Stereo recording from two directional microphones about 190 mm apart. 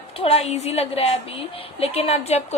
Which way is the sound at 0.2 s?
35° left (ahead or behind).